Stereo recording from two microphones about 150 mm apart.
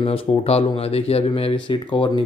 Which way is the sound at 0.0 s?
40° left (ahead or behind).